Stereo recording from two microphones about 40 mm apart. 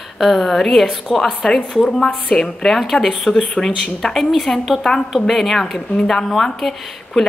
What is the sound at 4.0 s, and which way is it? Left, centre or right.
Speech, centre.